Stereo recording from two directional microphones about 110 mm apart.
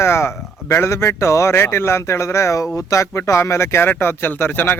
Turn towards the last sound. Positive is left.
turn(degrees=20)  # may be behind; listen again after turning